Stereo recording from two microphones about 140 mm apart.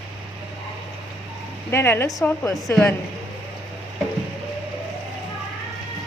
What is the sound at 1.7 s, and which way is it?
A woman's voice, 15° left (ahead or behind).